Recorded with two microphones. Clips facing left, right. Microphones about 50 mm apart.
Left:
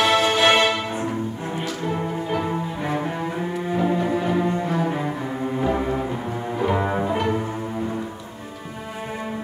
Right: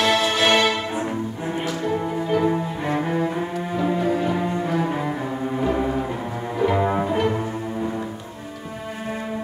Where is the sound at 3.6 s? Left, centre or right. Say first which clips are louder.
Left 1 dB; centre.